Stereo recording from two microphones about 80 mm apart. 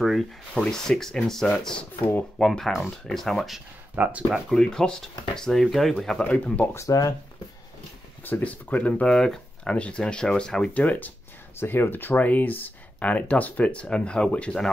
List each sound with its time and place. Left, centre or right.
0.0 s speech: centre
3.9 s speech: centre
4.3 s speech: centre
6.2 s speech: centre
6.7 s speech: left
8.2 s speech: left
9.1 s speech: centre
10.7 s speech: left